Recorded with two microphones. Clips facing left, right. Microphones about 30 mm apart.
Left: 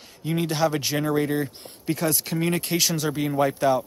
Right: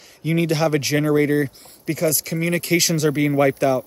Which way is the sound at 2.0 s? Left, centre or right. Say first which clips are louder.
Right 6 dB; centre.